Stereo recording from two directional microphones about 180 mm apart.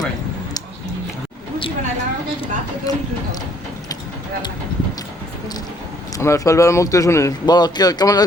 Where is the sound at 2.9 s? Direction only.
20° left (ahead or behind).